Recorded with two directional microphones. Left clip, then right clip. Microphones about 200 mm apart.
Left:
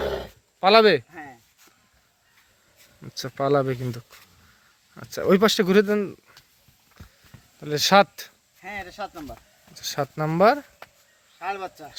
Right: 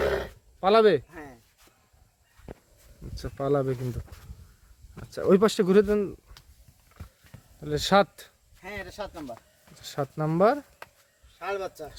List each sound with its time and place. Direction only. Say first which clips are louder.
0.0 s a sound: right 1 dB; 10° left (ahead or behind)
3.0 s speech: left 6 dB; 10° left (ahead or behind)
5.3 s speech: left 2 dB; centre (ahead or behind)
7.6 s speech: left 5 dB; 5° left (ahead or behind)
8.6 s speech: left 3 dB; 60° right (ahead or behind)
9.7 s speech: left 4 dB; 5° left (ahead or behind)
11.3 s speech: left 1 dB; 70° right (ahead or behind)